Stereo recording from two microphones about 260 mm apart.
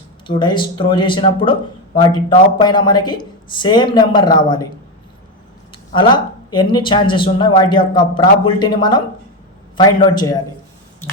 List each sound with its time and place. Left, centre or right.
0.3 s speech: centre
5.9 s speech: centre